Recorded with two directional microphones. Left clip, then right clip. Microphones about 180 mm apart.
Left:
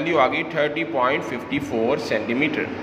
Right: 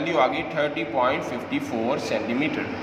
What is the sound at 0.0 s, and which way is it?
A man's voice, 15° left (ahead or behind).